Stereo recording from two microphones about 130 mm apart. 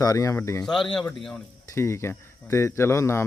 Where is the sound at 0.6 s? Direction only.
5° left (ahead or behind).